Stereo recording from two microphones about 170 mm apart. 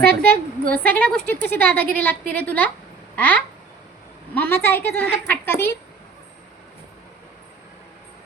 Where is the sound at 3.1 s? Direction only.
10° left (ahead or behind).